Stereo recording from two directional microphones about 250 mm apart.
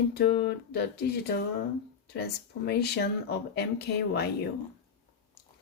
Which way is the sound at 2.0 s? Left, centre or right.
Left.